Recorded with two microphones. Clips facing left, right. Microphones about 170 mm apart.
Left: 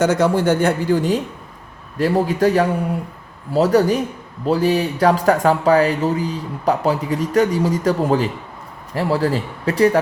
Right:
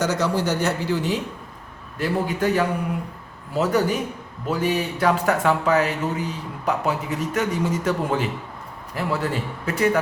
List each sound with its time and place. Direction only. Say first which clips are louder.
0.0 s speech: left 6 dB; 55° left (ahead or behind); by 10.0 s 35° left (ahead or behind)